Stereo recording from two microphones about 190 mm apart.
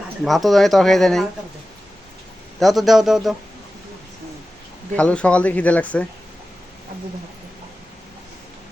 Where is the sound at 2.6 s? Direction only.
Centre (ahead or behind).